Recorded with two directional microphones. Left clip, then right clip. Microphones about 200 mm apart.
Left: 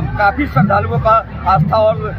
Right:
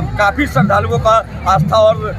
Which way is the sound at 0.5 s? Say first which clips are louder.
Right 1 dB; 20° right (ahead or behind).